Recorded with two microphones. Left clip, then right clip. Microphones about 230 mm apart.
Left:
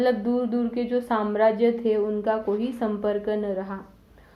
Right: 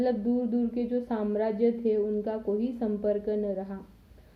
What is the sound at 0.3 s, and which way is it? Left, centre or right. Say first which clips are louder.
A woman's voice: left 4 dB; centre.